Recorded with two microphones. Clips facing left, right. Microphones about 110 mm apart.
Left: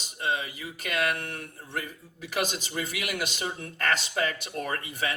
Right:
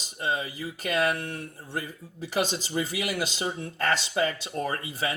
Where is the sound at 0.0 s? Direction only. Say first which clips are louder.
Right 1 dB; 40° right (ahead or behind).